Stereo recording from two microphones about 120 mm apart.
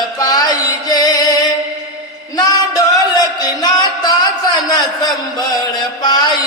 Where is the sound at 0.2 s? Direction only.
35° left (ahead or behind).